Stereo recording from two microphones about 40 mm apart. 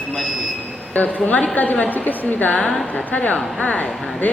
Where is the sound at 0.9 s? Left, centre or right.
Left.